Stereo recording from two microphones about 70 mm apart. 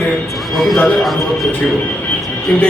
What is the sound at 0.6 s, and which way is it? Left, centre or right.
Speech, centre.